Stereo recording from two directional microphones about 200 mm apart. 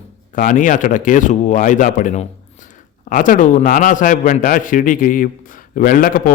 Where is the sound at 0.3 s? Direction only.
40° left (ahead or behind).